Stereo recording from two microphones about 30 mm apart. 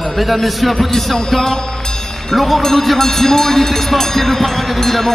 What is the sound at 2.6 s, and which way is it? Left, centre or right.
Speech, centre.